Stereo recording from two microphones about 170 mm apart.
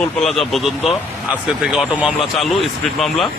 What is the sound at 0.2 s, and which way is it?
A man's voice, centre (ahead or behind).